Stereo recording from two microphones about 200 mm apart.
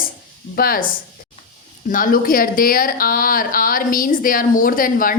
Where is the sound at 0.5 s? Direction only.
45° left (ahead or behind).